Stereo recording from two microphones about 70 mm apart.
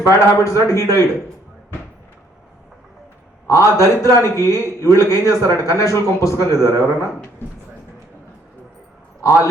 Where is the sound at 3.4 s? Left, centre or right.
Left.